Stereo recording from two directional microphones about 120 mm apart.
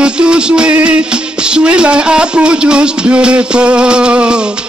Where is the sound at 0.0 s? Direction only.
10° right (ahead or behind).